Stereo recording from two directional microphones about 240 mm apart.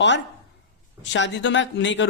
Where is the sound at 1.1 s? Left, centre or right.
Left.